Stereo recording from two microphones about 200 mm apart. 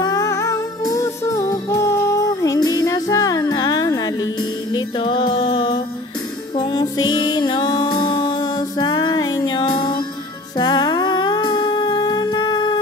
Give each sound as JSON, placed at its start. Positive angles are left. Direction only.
{"t": 0.0, "sound": "music", "side_deg": 15}
{"t": 10.6, "sound": "humming", "side_deg": 20}